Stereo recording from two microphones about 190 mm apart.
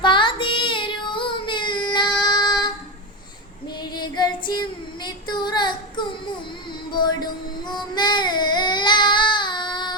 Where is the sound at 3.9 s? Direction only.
20° left (ahead or behind).